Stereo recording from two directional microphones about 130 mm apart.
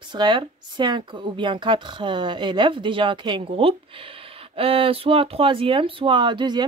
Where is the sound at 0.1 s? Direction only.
35° right (ahead or behind).